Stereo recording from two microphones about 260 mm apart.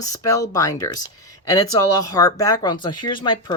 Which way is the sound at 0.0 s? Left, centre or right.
Centre.